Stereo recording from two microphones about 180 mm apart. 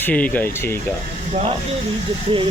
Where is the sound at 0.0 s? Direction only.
10° left (ahead or behind).